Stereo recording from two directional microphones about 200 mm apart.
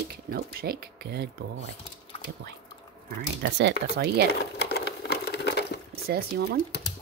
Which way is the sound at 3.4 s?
55° right (ahead or behind).